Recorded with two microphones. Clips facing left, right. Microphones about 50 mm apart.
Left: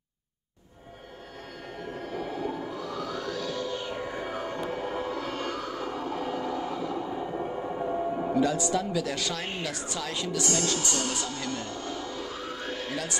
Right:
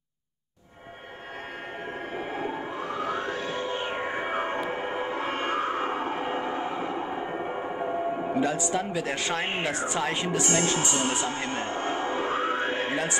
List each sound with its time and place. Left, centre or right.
2.1 s music: right
8.3 s speech: right